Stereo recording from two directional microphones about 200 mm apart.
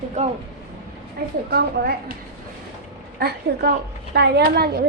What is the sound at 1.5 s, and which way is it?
Speech, 50° right (ahead or behind).